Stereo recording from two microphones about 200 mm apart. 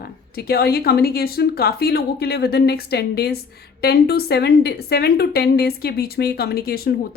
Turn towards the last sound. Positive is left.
turn(degrees=50)  # may be behind; listen again after turning